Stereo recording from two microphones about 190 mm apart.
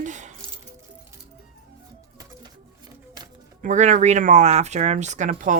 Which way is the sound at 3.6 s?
40° right (ahead or behind).